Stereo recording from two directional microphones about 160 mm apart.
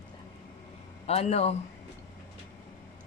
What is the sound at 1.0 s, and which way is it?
Speech, 40° left (ahead or behind).